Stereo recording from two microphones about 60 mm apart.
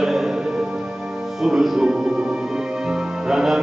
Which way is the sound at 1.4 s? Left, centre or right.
Centre.